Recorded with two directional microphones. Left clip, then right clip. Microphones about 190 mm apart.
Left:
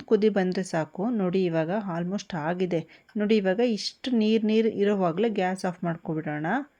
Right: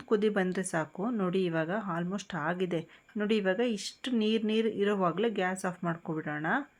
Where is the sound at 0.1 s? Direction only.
35° left (ahead or behind).